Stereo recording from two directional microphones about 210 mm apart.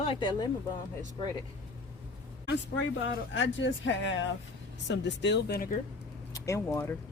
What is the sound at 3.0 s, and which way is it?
Speech, 60° left (ahead or behind).